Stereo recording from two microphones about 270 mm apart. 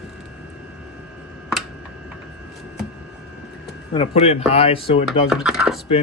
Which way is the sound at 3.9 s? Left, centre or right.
Left.